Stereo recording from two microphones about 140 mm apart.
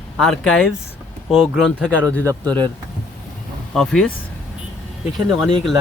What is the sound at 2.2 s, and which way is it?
Speech, 30° right (ahead or behind).